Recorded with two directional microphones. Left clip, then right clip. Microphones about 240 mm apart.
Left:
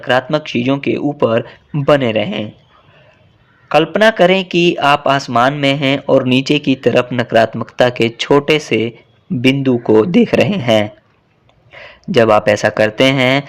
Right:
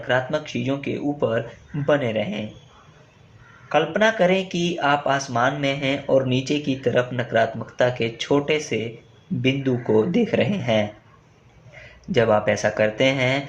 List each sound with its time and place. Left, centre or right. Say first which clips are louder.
0.0 s speech: left 8 dB; left
3.7 s speech: left 8 dB; left